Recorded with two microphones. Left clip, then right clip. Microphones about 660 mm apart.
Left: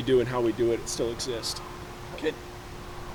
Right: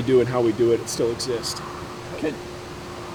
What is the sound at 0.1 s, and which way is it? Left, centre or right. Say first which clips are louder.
Speech: right 5 dB; left.